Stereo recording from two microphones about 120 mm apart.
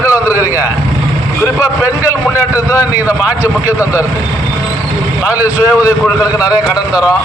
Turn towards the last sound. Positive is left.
turn(degrees=25)  # may be behind; listen again after turning